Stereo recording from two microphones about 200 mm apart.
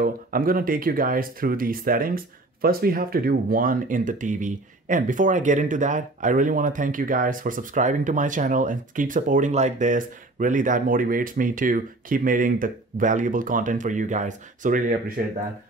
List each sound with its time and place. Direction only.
0.0 s speech: 45° right (ahead or behind)